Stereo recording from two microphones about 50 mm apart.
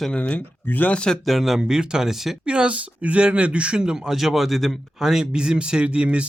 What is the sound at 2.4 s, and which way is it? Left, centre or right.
Speech, centre.